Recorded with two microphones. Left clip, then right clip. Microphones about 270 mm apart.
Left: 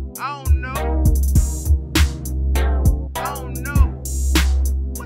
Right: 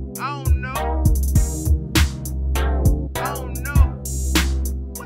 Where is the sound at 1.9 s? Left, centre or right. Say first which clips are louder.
Even; centre.